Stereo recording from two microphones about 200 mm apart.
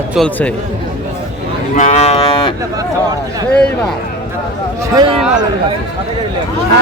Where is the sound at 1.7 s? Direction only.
35° left (ahead or behind).